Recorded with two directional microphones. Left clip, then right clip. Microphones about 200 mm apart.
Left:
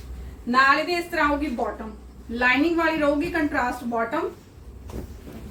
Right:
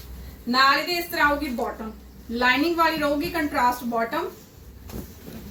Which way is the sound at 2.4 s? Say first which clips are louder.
Even; 15° left (ahead or behind).